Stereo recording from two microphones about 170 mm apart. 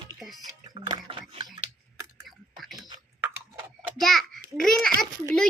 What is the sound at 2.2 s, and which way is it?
Typing, centre (ahead or behind).